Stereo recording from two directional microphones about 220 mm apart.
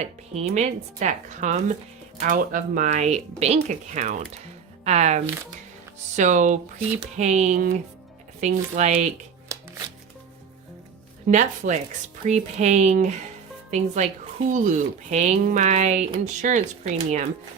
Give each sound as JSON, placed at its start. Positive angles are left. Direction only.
{"t": 0.0, "sound": "speech", "side_deg": -30}
{"t": 9.5, "sound": "shuffling cards", "side_deg": -15}
{"t": 11.3, "sound": "speech", "side_deg": -35}